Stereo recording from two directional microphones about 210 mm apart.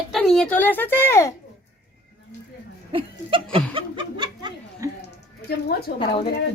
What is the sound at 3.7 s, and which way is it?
Speech, 25° right (ahead or behind).